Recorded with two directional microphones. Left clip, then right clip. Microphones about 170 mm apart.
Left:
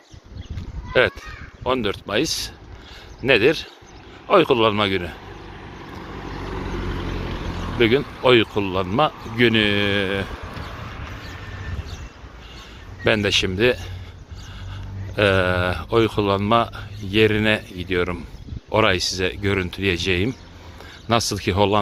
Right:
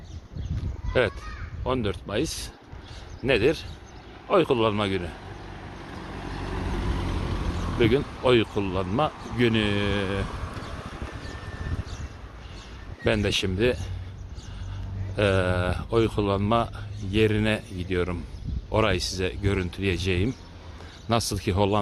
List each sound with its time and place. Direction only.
0.9 s speech: centre (ahead or behind)
1.6 s speech: 10° left (ahead or behind)
6.7 s vehicle: 45° right (ahead or behind)
6.9 s vehicle: 65° right (ahead or behind)
7.8 s speech: 5° left (ahead or behind)
10.3 s vehicle: 65° right (ahead or behind)
13.1 s speech: 5° left (ahead or behind)
15.1 s speech: 5° left (ahead or behind)